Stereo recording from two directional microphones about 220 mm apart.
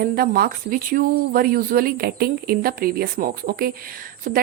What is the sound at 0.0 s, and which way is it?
Speech, 45° right (ahead or behind).